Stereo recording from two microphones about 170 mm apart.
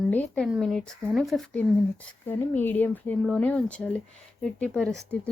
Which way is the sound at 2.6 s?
10° left (ahead or behind).